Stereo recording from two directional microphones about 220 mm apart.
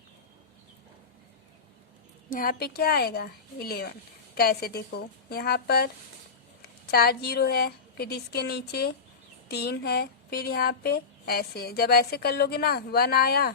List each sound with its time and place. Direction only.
2.3 s a woman's voice: 40° left (ahead or behind)